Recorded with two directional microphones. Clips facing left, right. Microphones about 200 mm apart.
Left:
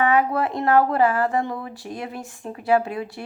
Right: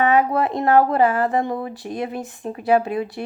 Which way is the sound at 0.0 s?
20° right (ahead or behind).